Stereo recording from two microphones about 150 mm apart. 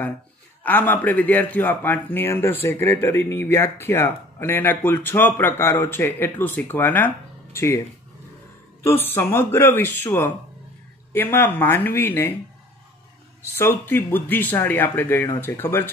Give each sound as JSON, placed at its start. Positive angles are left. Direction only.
{"t": 0.7, "sound": "speech", "side_deg": 10}
{"t": 8.8, "sound": "speech", "side_deg": 15}
{"t": 13.6, "sound": "speech", "side_deg": 15}